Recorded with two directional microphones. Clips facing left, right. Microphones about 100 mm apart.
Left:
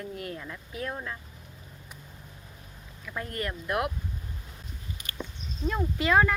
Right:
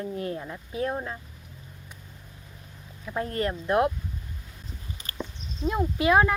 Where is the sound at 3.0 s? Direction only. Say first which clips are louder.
Right 6 dB; 30° right (ahead or behind).